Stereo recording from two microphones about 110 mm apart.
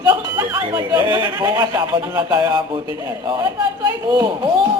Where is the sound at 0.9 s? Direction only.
20° right (ahead or behind).